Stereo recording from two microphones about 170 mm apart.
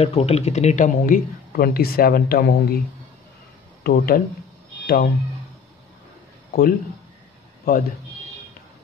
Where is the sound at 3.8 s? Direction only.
60° left (ahead or behind).